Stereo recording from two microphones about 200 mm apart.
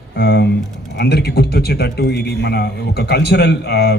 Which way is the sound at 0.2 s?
50° left (ahead or behind).